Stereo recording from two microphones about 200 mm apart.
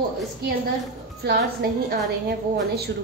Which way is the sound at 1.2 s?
50° right (ahead or behind).